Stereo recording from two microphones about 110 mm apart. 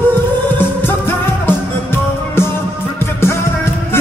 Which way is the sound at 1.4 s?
20° left (ahead or behind).